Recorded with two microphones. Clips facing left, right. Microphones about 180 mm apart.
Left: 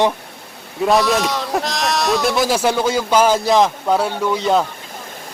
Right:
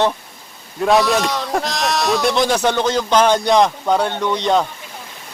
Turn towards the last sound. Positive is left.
turn(degrees=5)  # may be behind; listen again after turning